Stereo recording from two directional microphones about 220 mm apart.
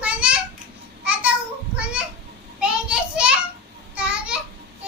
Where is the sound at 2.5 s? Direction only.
5° right (ahead or behind).